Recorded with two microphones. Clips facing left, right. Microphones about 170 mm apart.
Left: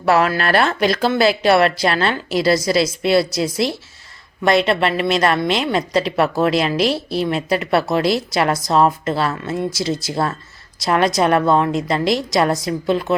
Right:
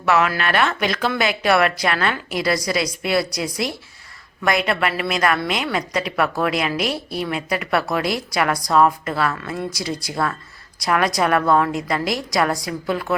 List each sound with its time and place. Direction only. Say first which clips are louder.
0.0 s speech: left 3 dB; 35° left (ahead or behind)